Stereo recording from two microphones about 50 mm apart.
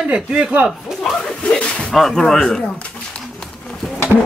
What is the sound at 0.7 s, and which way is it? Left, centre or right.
Chuckle, centre.